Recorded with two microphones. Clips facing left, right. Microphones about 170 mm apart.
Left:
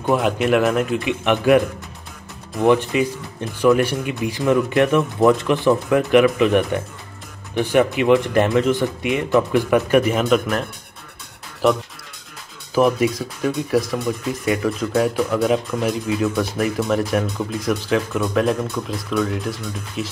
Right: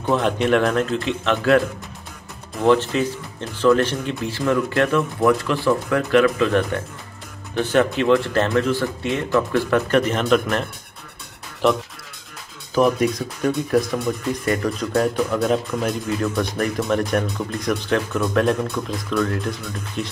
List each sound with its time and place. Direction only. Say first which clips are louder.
0.0 s speech: left 1 dB; 10° left (ahead or behind)
2.6 s speech: left 1 dB; 15° left (ahead or behind)
12.7 s speech: left 1 dB; centre (ahead or behind)